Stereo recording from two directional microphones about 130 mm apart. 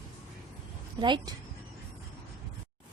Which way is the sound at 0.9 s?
35° right (ahead or behind).